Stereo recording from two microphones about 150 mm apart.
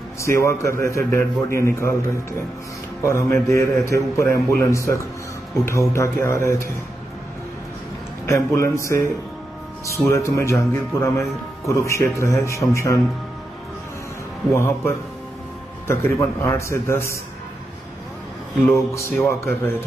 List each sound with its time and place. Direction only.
0.2 s a man's voice: 20° left (ahead or behind)
3.1 s a man's voice: 20° left (ahead or behind)
8.3 s a man's voice: 20° left (ahead or behind)
14.5 s a man's voice: 20° left (ahead or behind)
18.7 s speech: 15° left (ahead or behind)